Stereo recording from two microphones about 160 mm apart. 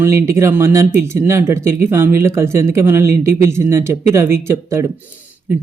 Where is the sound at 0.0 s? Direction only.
15° right (ahead or behind).